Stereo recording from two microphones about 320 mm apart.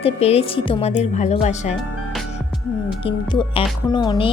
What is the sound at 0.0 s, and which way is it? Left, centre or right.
A woman's voice, centre.